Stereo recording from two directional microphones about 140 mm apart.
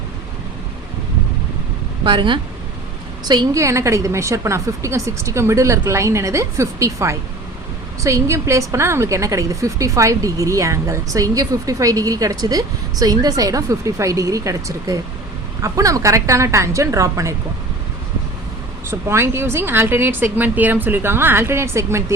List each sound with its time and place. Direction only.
2.0 s a woman's voice: 35° right (ahead or behind)
18.9 s a woman's voice: 20° right (ahead or behind)